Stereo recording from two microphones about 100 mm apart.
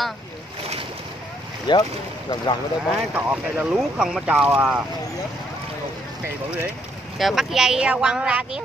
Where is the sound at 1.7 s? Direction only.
50° left (ahead or behind).